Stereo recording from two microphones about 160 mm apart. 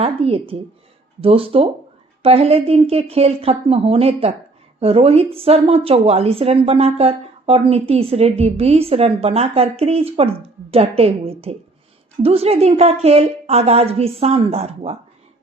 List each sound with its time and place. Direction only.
0.0 s a woman's voice: 35° right (ahead or behind)